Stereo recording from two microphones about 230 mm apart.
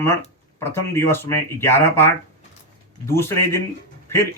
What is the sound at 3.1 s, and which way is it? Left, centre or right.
Speech, centre.